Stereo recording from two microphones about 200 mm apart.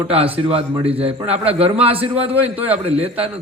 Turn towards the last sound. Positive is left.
turn(degrees=-30)  # may be behind; listen again after turning